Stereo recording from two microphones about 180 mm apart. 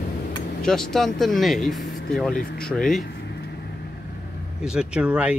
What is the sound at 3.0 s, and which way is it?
Vehicle, 65° left (ahead or behind).